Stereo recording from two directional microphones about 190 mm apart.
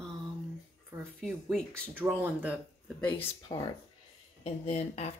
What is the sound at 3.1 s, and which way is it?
Speech, 20° left (ahead or behind).